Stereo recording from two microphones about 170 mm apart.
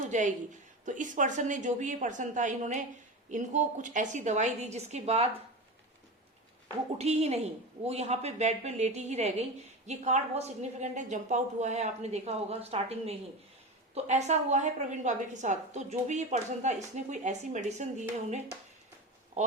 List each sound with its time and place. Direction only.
0.0 s a woman's voice: 45° right (ahead or behind)
7.0 s a woman's voice: 40° right (ahead or behind)